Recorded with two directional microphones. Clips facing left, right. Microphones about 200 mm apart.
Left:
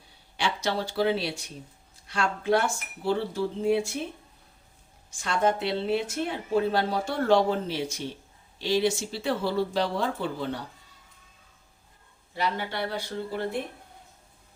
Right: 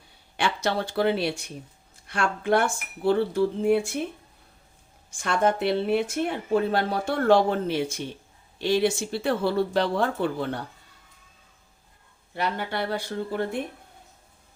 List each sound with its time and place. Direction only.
0.3 s speech: 55° right (ahead or behind)
5.2 s speech: 55° right (ahead or behind)
12.4 s speech: 55° right (ahead or behind)